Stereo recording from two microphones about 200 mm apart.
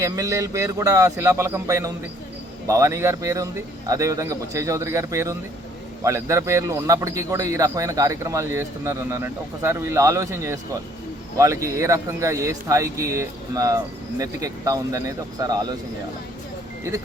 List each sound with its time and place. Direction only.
0.0 s a man's voice: 15° right (ahead or behind)